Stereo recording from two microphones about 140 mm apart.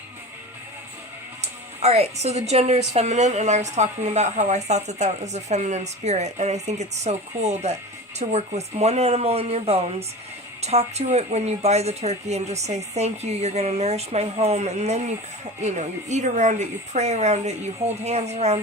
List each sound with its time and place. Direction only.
1.8 s a woman's voice: 50° right (ahead or behind)